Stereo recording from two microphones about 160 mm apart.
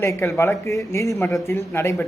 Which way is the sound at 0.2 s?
15° left (ahead or behind).